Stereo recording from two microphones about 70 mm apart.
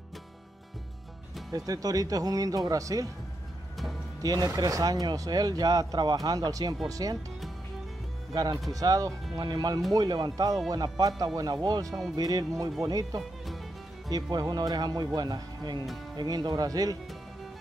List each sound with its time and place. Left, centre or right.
1.5 s speech: right
4.2 s speech: right
6.9 s speech: right
8.7 s speech: right
14.3 s speech: right